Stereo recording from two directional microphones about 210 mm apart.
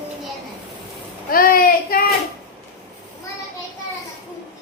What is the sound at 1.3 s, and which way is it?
Child singing, 45° left (ahead or behind).